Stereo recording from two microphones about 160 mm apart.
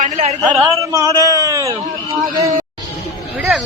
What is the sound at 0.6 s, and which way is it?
A man's voice, 20° right (ahead or behind).